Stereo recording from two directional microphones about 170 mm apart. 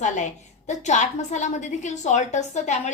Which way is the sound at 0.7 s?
45° left (ahead or behind).